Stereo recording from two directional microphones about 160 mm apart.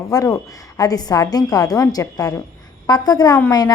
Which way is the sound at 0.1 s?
20° left (ahead or behind).